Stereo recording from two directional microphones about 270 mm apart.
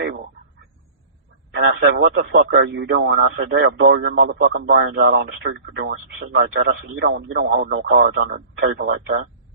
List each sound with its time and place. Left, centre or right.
1.5 s a man's voice: right